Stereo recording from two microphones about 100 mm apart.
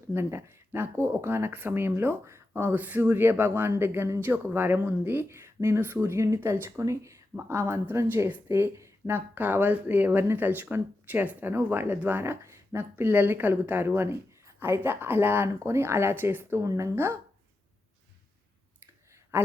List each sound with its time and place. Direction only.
0.1 s speech: 25° right (ahead or behind)
19.3 s speech: 20° right (ahead or behind)